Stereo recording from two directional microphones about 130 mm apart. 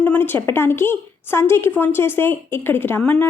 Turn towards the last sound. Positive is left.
turn(degrees=15)  # may be behind; listen again after turning